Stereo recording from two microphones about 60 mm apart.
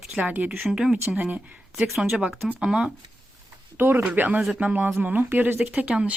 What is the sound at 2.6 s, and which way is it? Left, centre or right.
Speech, centre.